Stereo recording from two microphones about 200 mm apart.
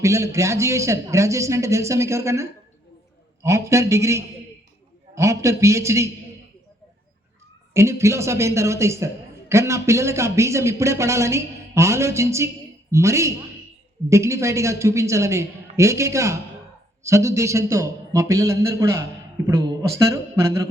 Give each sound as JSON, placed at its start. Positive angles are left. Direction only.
{"t": 0.0, "sound": "speech", "side_deg": -15}
{"t": 7.7, "sound": "speech", "side_deg": -15}